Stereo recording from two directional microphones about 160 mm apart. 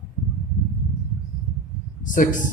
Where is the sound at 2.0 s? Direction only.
55° left (ahead or behind).